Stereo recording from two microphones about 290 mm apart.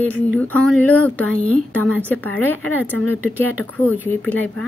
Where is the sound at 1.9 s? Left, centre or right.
Centre.